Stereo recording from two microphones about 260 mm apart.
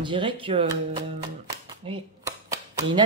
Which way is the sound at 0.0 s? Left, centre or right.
Centre.